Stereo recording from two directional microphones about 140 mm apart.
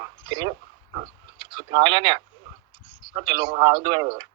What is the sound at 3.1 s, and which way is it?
A man's voice, 30° right (ahead or behind).